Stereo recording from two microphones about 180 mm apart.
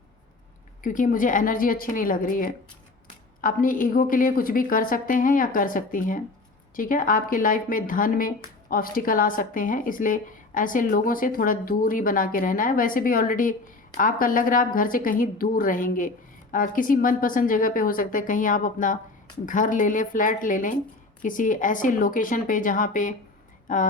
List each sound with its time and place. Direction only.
0.8 s a woman's voice: 45° left (ahead or behind)